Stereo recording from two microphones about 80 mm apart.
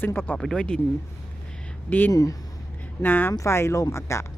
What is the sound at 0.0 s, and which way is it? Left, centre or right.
Speech, left.